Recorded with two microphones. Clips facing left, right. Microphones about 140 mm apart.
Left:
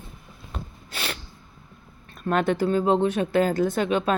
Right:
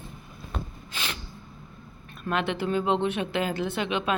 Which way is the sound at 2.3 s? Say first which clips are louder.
Left 5 dB; 40° left (ahead or behind).